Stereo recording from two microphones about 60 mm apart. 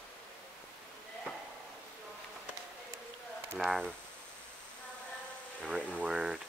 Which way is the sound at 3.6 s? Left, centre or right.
Centre.